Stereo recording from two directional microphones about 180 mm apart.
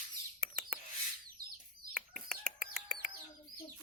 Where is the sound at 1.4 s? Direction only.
55° right (ahead or behind).